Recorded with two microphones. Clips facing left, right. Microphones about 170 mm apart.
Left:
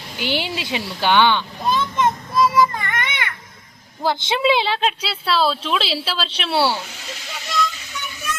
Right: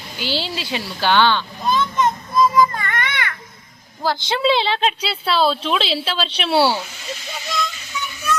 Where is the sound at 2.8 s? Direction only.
20° left (ahead or behind).